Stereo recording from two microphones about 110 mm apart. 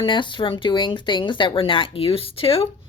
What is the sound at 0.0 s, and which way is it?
Speech, 45° left (ahead or behind).